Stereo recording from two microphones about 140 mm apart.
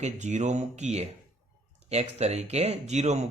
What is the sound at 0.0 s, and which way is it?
Speech, 55° right (ahead or behind).